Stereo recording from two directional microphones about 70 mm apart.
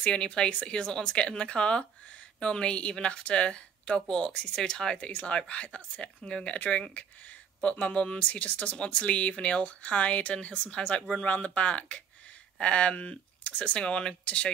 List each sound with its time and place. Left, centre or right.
0.0 s speech: centre